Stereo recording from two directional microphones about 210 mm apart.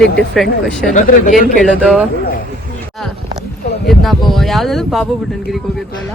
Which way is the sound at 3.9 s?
Centre (ahead or behind).